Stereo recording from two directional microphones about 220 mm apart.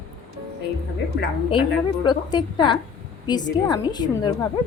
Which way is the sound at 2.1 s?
20° left (ahead or behind).